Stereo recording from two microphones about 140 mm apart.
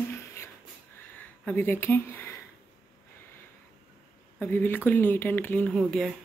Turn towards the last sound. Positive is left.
turn(degrees=0)  # may be behind; listen again after turning